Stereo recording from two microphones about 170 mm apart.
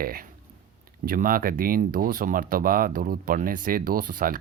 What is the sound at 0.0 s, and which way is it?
Speech, 60° right (ahead or behind).